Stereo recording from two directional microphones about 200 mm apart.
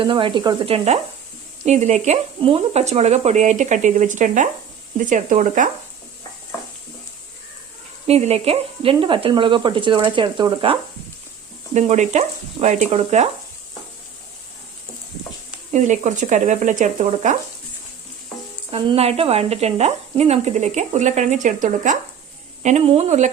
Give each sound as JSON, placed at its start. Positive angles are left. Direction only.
{"t": 0.0, "sound": "speech", "side_deg": -25}
{"t": 8.0, "sound": "speech", "side_deg": -30}
{"t": 11.7, "sound": "speech", "side_deg": -35}
{"t": 15.7, "sound": "speech", "side_deg": -35}
{"t": 18.7, "sound": "speech", "side_deg": -30}